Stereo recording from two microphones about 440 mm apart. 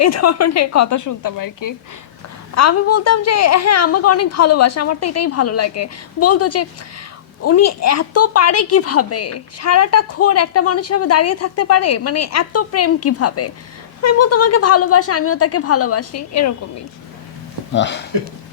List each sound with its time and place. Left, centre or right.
0.0 s a woman's voice: left
2.6 s a woman's voice: left
17.7 s speech: left